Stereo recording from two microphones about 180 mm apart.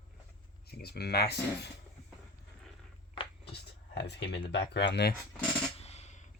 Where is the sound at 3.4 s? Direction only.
70° left (ahead or behind).